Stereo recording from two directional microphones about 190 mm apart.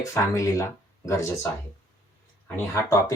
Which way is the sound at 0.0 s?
15° left (ahead or behind).